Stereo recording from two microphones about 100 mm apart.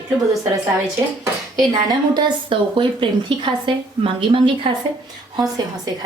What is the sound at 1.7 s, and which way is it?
Speech, 45° right (ahead or behind).